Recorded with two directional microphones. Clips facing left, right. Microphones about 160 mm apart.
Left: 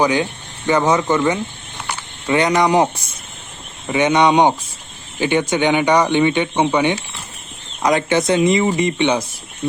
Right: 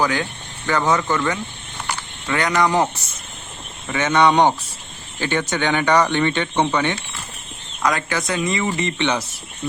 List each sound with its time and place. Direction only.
0.0 s speech: 20° left (ahead or behind)